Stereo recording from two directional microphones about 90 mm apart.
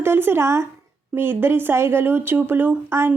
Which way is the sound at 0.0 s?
25° right (ahead or behind).